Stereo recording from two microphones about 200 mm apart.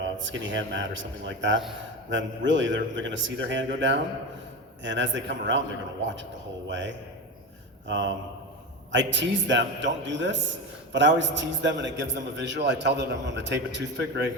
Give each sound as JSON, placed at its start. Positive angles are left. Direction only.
{"t": 0.2, "sound": "a man's voice", "side_deg": -65}
{"t": 6.7, "sound": "a man's voice", "side_deg": -65}